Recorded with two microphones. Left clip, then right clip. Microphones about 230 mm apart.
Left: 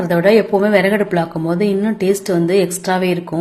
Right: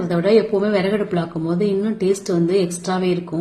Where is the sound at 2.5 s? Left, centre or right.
Centre.